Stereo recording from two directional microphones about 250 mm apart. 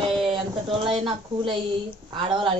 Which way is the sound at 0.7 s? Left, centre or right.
Right.